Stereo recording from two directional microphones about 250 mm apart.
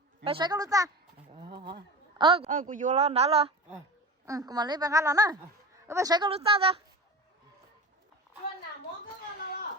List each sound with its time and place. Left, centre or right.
0.3 s a woman's voice: centre
1.5 s speech: right
2.1 s a man's voice: centre